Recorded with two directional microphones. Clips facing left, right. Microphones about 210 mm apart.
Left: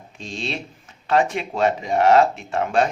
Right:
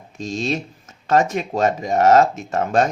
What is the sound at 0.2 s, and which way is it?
Speech, 40° right (ahead or behind).